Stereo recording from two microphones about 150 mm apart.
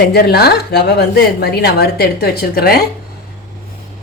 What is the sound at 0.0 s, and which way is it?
A woman's voice, 90° left.